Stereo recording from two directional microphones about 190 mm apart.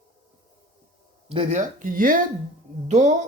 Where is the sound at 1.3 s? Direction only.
35° right (ahead or behind).